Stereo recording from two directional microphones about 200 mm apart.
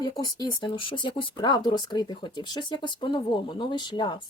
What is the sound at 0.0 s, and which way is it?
Speech, 20° left (ahead or behind).